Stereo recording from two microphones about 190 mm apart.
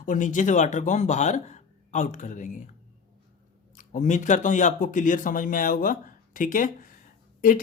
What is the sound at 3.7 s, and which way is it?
Speech, 40° left (ahead or behind).